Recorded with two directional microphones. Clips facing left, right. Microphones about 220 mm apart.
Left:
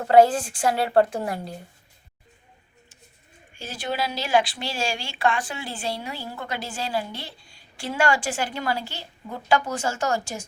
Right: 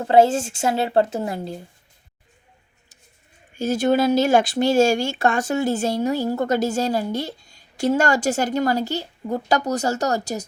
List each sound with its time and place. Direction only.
0.0 s a woman's voice: 25° right (ahead or behind)
3.6 s speech: 45° right (ahead or behind)